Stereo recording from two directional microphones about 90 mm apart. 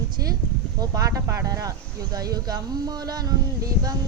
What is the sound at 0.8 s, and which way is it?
Speech, 40° right (ahead or behind).